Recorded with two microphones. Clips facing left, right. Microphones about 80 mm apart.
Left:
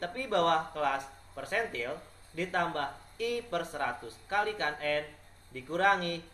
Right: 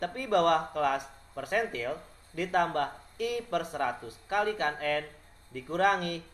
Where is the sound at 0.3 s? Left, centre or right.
Right.